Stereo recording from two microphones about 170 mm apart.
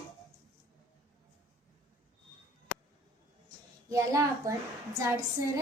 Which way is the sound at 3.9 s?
20° right (ahead or behind).